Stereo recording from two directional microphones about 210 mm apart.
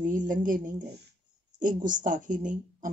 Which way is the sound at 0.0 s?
40° right (ahead or behind).